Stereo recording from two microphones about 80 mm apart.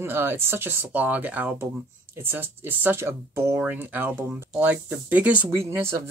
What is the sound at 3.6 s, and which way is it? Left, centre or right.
Speech, right.